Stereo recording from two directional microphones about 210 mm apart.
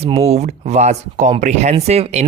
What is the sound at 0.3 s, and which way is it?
Speech, 30° right (ahead or behind).